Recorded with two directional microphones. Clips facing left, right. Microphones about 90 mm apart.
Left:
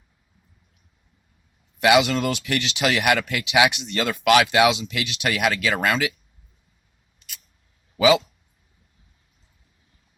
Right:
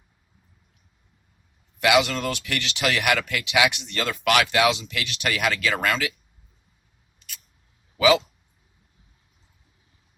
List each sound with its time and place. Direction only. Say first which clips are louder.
1.8 s speech: left 3 dB; 20° left (ahead or behind)
7.9 s speech: left 1 dB; 20° left (ahead or behind)